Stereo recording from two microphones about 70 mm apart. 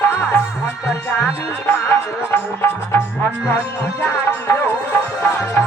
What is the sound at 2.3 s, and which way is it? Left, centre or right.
Music, left.